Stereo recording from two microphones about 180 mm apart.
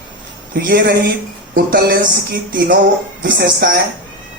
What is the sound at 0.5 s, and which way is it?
Speech, 60° right (ahead or behind).